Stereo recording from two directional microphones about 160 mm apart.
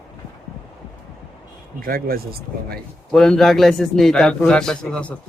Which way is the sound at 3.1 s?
5° left (ahead or behind).